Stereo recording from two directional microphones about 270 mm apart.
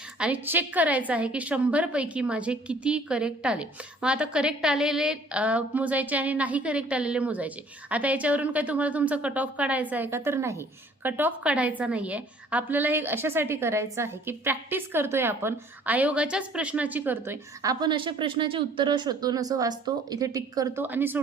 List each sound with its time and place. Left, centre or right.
0.2 s a woman's voice: centre